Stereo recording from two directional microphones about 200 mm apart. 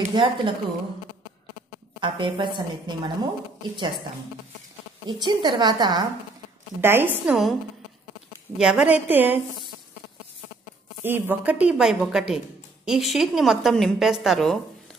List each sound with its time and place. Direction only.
0.1 s a woman's voice: 25° right (ahead or behind)
2.0 s a woman's voice: 25° right (ahead or behind)
5.0 s a woman's voice: 20° right (ahead or behind); by 7.5 s 5° right (ahead or behind)
8.5 s a woman's voice: 5° right (ahead or behind)
11.1 s a woman's voice: 10° right (ahead or behind)